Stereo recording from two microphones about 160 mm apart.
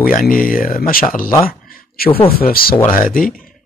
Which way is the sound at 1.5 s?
70° left (ahead or behind).